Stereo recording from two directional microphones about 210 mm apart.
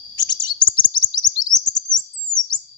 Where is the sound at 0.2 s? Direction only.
20° left (ahead or behind).